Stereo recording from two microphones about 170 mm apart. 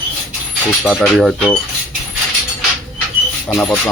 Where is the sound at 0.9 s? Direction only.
Centre (ahead or behind).